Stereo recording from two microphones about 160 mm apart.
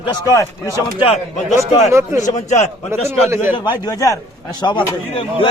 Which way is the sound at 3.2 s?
10° right (ahead or behind).